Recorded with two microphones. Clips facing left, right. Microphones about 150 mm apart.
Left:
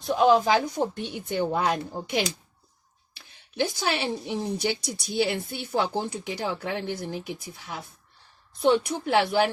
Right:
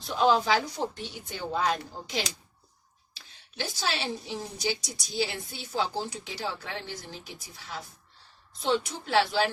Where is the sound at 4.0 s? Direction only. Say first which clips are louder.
Left 5 dB; 60° left (ahead or behind).